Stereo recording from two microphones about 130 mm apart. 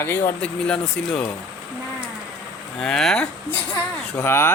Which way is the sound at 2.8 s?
5° left (ahead or behind).